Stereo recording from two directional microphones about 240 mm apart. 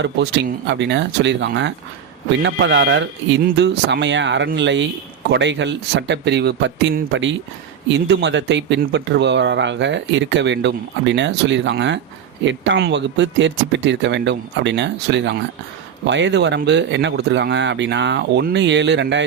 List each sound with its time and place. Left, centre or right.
0.0 s speech: right